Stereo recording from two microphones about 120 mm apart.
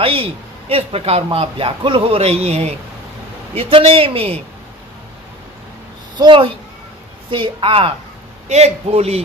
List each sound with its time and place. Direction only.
0.0 s a man's voice: 50° right (ahead or behind)
6.1 s a man's voice: 40° right (ahead or behind)
8.4 s a man's voice: 65° right (ahead or behind)